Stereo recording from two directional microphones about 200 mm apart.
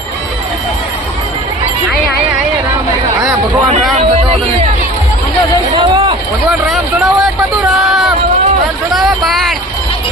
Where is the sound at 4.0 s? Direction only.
30° right (ahead or behind).